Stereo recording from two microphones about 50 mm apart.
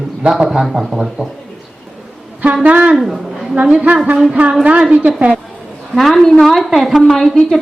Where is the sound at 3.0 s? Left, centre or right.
Centre.